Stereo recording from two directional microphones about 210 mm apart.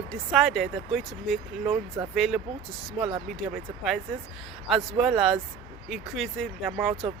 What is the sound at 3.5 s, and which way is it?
Speech, centre (ahead or behind).